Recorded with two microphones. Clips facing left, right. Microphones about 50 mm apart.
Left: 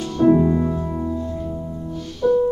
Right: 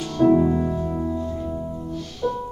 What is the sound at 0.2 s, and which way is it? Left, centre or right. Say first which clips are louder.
Music: left 2 dB; centre.